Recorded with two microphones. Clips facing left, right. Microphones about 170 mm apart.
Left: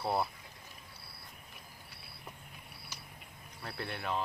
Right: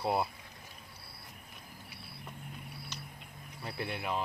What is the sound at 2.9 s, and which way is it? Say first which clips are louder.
Cricket: right 2 dB; 10° left (ahead or behind).